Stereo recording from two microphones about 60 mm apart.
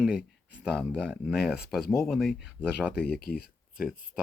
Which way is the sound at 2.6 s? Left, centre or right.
Centre.